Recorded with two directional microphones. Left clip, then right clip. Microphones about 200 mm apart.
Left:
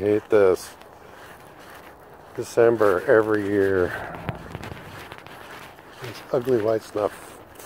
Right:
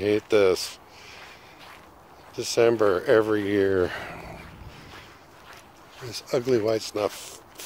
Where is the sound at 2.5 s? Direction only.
15° right (ahead or behind).